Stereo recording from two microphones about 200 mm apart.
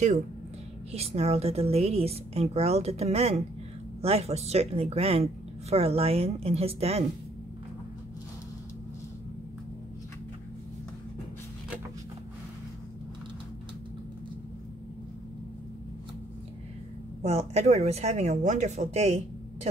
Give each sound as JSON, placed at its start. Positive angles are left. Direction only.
{"t": 0.9, "sound": "speech", "side_deg": -30}
{"t": 17.2, "sound": "speech", "side_deg": -35}